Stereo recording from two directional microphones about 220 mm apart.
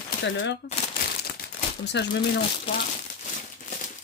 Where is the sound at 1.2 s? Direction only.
50° left (ahead or behind).